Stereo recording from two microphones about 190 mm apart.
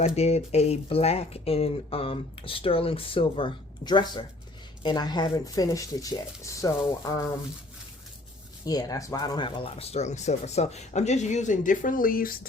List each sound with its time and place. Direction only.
0.0 s speech: 35° left (ahead or behind); by 7.2 s 15° left (ahead or behind)
8.6 s speech: 20° left (ahead or behind); by 12.5 s 50° left (ahead or behind)